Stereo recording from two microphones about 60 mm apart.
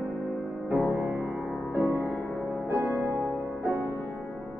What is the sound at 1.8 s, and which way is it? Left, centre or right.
Music, left.